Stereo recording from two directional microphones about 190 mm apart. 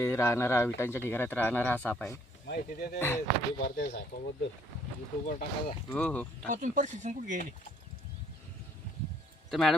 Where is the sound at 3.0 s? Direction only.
10° left (ahead or behind).